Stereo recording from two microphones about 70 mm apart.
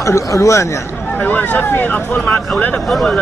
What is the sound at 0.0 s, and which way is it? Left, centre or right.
Speech, left.